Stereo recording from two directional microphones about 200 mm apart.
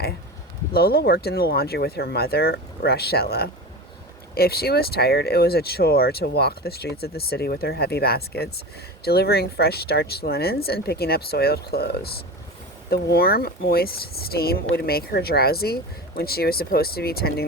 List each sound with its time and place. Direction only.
0.7 s speech: 50° left (ahead or behind)